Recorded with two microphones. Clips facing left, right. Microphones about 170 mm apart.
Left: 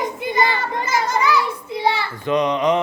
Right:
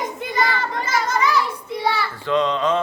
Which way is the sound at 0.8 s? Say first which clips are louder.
Left 2 dB; 10° left (ahead or behind).